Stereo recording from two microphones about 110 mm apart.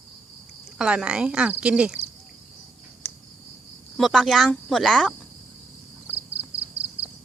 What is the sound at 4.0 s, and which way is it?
Speech, centre (ahead or behind).